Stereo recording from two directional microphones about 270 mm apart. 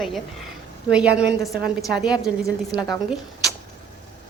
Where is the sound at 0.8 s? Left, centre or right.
Centre.